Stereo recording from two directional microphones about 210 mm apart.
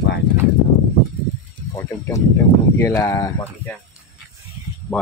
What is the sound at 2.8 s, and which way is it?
Speech, 15° left (ahead or behind).